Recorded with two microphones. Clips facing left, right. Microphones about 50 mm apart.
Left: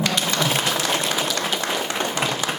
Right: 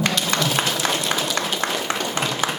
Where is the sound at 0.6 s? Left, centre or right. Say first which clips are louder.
Right 1 dB; right.